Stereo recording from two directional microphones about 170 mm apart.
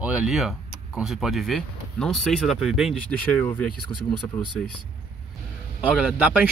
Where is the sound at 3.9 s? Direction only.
25° left (ahead or behind).